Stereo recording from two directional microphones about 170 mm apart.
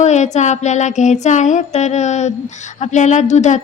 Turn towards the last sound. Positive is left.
turn(degrees=45)  # may be behind; listen again after turning